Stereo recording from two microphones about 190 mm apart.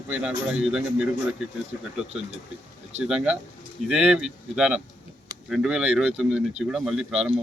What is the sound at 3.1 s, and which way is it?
A man's voice, 5° right (ahead or behind).